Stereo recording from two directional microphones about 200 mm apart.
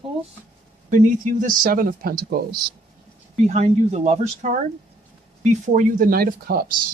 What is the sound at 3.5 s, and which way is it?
Speech, 35° right (ahead or behind).